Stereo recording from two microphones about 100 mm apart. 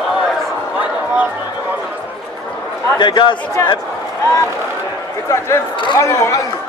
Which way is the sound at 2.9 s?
50° left (ahead or behind).